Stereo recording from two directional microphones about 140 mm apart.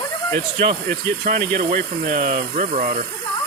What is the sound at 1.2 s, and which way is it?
Speech, 75° right (ahead or behind).